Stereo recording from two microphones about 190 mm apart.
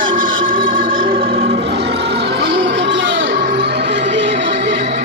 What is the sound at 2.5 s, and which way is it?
Music, 70° right (ahead or behind).